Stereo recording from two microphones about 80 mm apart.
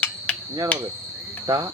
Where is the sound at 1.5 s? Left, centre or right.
Right.